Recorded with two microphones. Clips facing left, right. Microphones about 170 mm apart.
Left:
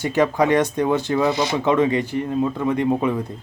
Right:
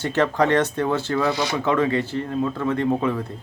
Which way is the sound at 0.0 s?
10° left (ahead or behind).